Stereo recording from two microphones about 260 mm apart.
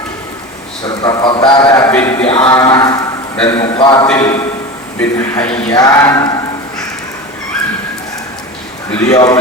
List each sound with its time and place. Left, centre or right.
0.9 s a man's voice: centre
2.2 s a man's voice: centre
9.0 s a man's voice: centre